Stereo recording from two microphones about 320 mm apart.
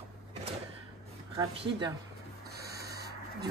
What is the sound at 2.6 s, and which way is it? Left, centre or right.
Owl, right.